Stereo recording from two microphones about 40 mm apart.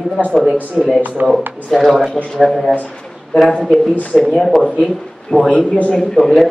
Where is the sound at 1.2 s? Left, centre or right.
Right.